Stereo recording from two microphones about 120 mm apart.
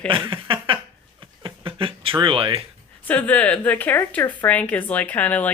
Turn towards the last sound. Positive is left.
turn(degrees=15)  # may be behind; listen again after turning